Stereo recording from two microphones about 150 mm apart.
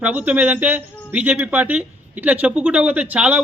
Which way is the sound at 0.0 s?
10° right (ahead or behind).